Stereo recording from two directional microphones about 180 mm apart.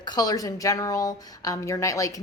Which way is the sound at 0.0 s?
20° left (ahead or behind).